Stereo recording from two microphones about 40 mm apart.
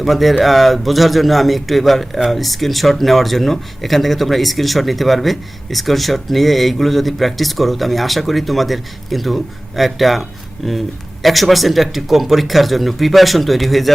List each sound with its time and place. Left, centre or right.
0.0 s speech: centre